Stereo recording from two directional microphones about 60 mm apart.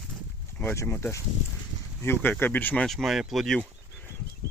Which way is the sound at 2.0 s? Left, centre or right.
Left.